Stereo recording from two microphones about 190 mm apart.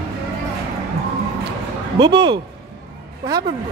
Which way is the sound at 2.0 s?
25° right (ahead or behind).